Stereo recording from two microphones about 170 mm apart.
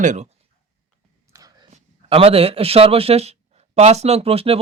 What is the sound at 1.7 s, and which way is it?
A man's voice, 35° right (ahead or behind).